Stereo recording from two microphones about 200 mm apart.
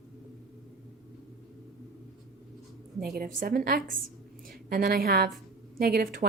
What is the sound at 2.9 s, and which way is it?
A woman's voice, 50° right (ahead or behind).